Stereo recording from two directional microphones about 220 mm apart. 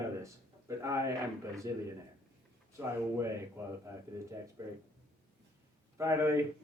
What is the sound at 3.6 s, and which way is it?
Speech, 15° right (ahead or behind).